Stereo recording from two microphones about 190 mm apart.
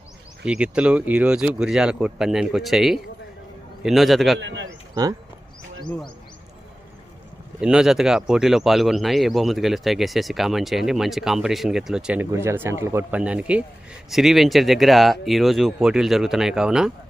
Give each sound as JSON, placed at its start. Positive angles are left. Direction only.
{"t": 0.4, "sound": "speech", "side_deg": -5}
{"t": 4.4, "sound": "a man's voice", "side_deg": -75}
{"t": 7.6, "sound": "speech", "side_deg": -5}